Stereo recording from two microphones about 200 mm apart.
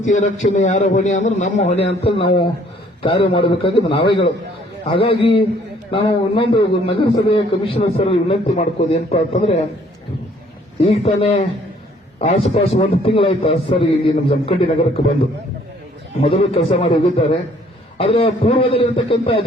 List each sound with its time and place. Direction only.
0.0 s a man's voice: 40° left (ahead or behind)
10.8 s a man's voice: 30° left (ahead or behind)
16.2 s a man's voice: 30° left (ahead or behind)